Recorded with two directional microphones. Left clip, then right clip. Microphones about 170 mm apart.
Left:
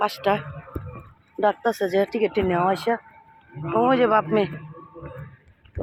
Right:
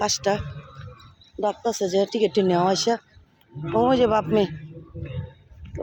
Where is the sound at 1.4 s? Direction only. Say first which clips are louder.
Left 3 dB; centre (ahead or behind).